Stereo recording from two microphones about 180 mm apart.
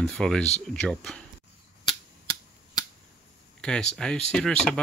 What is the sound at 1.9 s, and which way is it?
Finger snapping, 20° left (ahead or behind).